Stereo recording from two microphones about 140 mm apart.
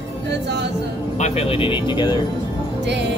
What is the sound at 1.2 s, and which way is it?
Speech, 50° left (ahead or behind).